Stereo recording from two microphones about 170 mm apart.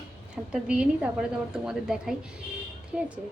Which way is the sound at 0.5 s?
5° right (ahead or behind).